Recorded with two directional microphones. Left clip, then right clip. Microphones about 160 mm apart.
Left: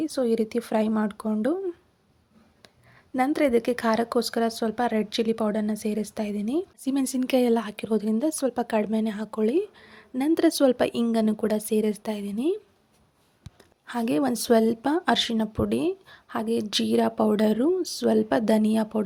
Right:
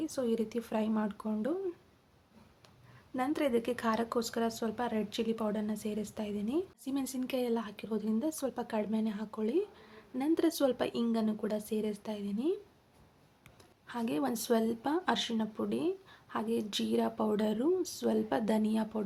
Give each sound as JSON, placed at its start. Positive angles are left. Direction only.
{"t": 0.0, "sound": "speech", "side_deg": 35}
{"t": 3.2, "sound": "speech", "side_deg": 35}
{"t": 13.8, "sound": "speech", "side_deg": 40}